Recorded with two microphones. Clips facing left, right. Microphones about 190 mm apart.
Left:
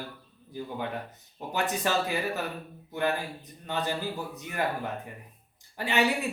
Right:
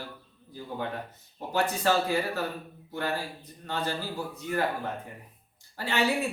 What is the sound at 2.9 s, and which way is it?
A man's voice, 20° left (ahead or behind).